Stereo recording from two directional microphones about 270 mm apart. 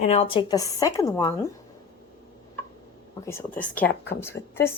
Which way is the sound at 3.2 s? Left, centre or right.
Centre.